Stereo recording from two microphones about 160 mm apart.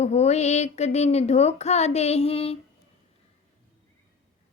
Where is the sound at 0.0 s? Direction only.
40° left (ahead or behind).